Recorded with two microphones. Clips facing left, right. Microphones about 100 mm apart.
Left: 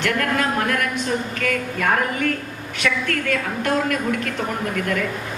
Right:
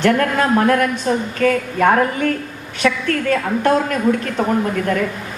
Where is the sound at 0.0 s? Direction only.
35° right (ahead or behind).